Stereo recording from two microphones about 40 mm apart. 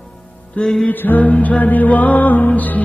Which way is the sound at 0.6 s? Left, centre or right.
Left.